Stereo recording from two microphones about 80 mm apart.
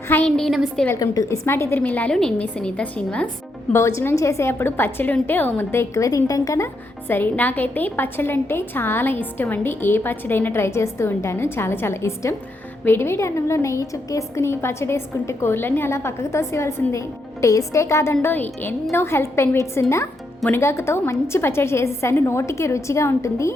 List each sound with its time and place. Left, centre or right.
0.3 s a woman's voice: centre
0.9 s a woman's voice: left
1.5 s a woman's voice: left
1.8 s a woman's voice: centre
3.7 s a woman's voice: left
7.1 s a woman's voice: left